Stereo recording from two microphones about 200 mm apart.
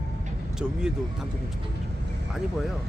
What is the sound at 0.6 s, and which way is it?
Speech, 5° right (ahead or behind).